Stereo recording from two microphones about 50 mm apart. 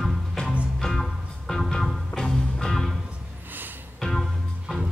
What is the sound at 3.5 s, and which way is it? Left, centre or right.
Music, right.